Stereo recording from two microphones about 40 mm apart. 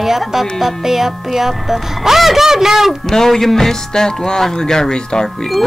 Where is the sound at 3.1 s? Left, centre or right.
Centre.